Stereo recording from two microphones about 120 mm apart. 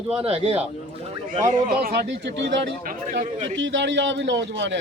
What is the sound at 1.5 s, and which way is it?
Speech, 75° right (ahead or behind).